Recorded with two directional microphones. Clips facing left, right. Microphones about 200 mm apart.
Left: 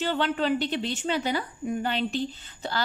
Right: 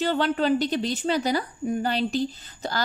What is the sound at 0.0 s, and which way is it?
A woman's voice, 40° right (ahead or behind).